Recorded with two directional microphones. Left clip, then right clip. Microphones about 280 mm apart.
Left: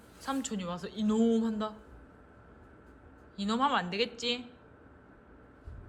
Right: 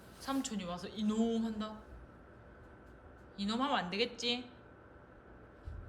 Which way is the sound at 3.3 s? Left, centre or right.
Centre.